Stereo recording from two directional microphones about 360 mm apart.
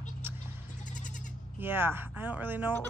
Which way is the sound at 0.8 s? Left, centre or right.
Left.